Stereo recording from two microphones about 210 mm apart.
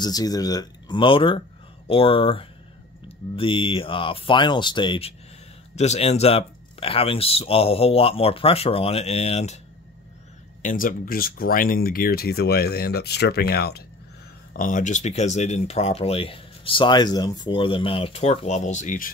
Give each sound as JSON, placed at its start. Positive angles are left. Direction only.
{"t": 0.0, "sound": "speech", "side_deg": 20}
{"t": 10.6, "sound": "speech", "side_deg": 40}